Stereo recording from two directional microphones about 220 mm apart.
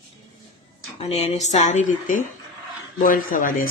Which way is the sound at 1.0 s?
30° left (ahead or behind).